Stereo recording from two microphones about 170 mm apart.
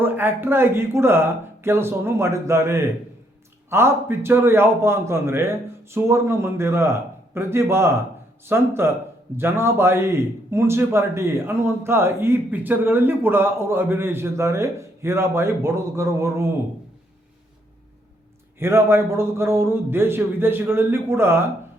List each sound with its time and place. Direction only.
0.0 s a man's voice: 10° right (ahead or behind)
18.6 s a man's voice: 15° right (ahead or behind)